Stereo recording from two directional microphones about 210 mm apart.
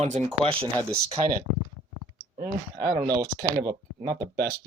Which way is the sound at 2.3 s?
50° right (ahead or behind).